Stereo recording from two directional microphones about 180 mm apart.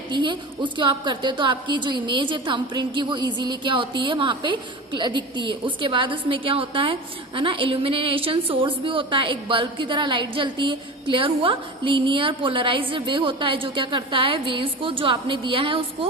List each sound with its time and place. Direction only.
0.1 s a woman's voice: 25° right (ahead or behind)